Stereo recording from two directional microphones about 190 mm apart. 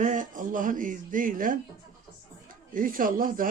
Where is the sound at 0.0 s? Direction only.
40° right (ahead or behind).